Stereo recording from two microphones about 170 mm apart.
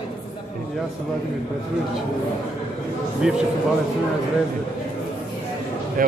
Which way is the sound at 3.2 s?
5° right (ahead or behind).